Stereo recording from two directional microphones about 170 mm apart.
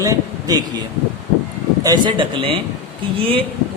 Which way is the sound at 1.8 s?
25° right (ahead or behind).